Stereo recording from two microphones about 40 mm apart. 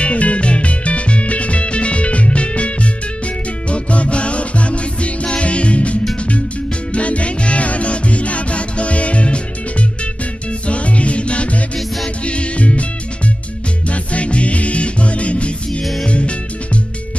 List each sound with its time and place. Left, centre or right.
0.0 s music: left
10.7 s music: left
13.8 s music: left